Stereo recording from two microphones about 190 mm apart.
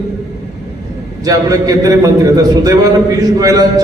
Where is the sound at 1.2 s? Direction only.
20° right (ahead or behind).